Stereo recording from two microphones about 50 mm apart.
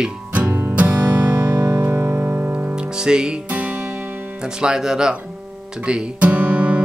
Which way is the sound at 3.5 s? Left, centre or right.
Right.